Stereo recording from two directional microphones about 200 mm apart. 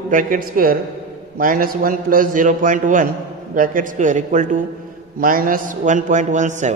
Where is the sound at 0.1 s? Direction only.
40° right (ahead or behind).